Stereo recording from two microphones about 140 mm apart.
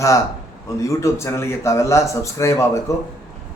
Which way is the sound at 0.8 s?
20° left (ahead or behind).